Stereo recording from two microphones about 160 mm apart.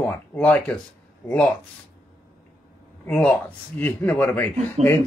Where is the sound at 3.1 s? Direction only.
10° left (ahead or behind).